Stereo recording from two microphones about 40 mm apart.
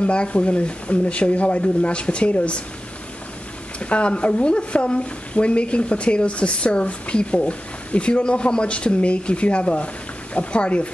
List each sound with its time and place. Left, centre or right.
0.0 s speech: left
3.8 s speech: left